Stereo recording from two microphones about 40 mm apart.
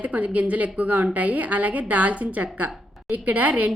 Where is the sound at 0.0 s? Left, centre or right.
Right.